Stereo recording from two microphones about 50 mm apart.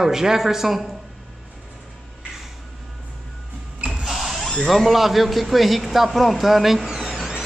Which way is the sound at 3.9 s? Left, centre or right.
Centre.